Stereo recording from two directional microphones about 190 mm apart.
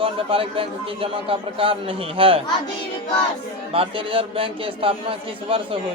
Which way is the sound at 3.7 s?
30° right (ahead or behind).